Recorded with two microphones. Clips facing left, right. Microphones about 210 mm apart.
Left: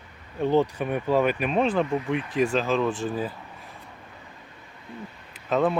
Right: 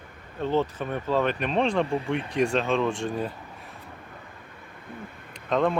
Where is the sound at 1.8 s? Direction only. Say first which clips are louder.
Left 1 dB; 30° right (ahead or behind).